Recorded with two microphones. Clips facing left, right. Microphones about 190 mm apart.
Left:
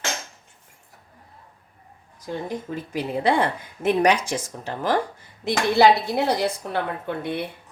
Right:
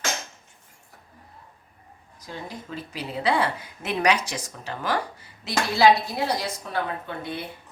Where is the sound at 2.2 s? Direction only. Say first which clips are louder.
Left 8 dB; 50° left (ahead or behind).